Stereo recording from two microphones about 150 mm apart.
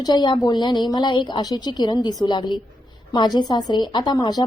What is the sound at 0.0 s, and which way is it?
A woman's voice, 30° left (ahead or behind).